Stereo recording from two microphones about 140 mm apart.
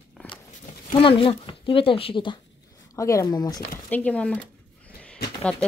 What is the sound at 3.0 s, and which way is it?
Speech, 25° left (ahead or behind).